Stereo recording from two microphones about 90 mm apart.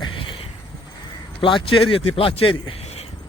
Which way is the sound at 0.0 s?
65° left (ahead or behind).